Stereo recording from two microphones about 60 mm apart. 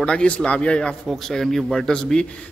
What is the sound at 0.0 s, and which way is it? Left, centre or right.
A man's voice, centre.